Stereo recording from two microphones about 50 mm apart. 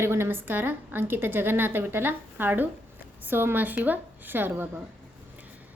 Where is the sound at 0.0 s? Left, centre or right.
Right.